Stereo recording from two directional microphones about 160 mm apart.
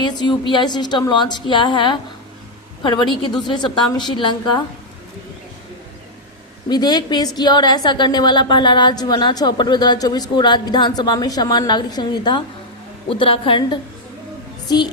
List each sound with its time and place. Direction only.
0.3 s a woman's voice: 30° left (ahead or behind)
6.7 s a woman's voice: 25° left (ahead or behind)